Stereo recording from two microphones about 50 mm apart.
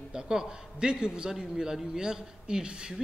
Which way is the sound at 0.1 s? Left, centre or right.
Centre.